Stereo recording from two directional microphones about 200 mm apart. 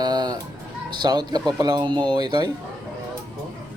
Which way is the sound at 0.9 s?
20° right (ahead or behind).